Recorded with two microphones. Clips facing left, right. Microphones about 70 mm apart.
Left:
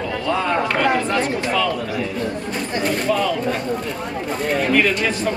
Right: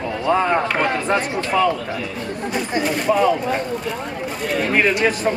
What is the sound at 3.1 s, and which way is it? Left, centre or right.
Speech, centre.